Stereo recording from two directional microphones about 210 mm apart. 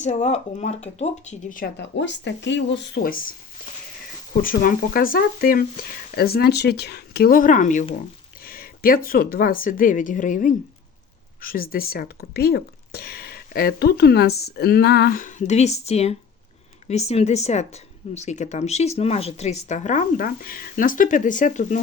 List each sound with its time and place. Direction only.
0.0 s speech: 35° left (ahead or behind)
4.4 s speech: 40° left (ahead or behind)